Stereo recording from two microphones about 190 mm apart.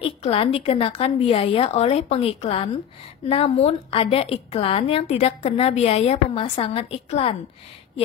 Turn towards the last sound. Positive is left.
turn(degrees=30)  # may be behind; listen again after turning